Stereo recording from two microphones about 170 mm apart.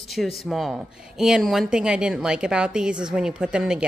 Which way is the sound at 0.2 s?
5° left (ahead or behind).